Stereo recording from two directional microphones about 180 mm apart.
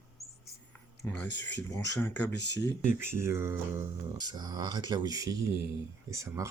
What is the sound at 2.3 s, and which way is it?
Speech, 70° left (ahead or behind).